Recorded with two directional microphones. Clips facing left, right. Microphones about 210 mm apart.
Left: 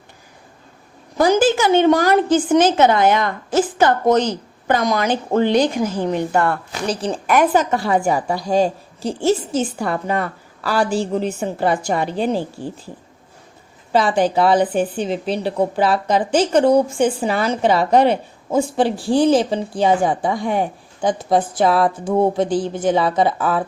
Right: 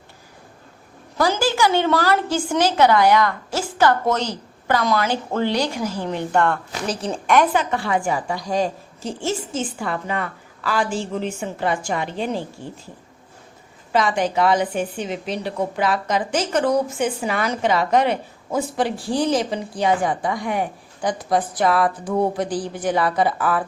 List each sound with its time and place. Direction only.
1.2 s a woman's voice: 20° left (ahead or behind); by 7.4 s centre (ahead or behind)
7.5 s a woman's voice: 40° left (ahead or behind)
13.9 s a woman's voice: 30° left (ahead or behind)